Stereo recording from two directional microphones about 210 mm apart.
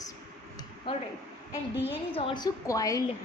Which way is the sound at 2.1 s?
25° left (ahead or behind).